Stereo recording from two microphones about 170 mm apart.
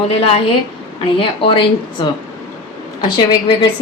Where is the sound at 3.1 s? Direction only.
30° left (ahead or behind).